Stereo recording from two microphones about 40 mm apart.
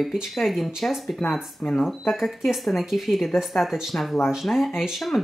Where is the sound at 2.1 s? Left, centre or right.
Centre.